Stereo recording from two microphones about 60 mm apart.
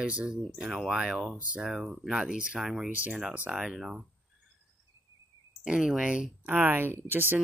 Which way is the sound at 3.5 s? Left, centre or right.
Centre.